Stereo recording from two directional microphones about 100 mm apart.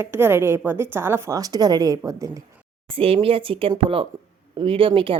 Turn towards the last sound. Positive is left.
turn(degrees=-60)  # may be behind; listen again after turning